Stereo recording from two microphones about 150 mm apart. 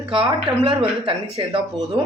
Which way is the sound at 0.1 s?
35° right (ahead or behind).